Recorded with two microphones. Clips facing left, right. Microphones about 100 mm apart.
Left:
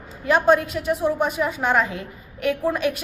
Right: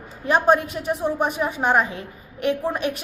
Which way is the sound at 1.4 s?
20° right (ahead or behind).